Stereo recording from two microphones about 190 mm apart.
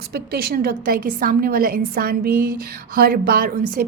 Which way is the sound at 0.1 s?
55° right (ahead or behind).